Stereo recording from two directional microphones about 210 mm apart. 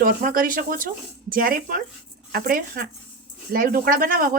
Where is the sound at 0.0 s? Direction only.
40° right (ahead or behind).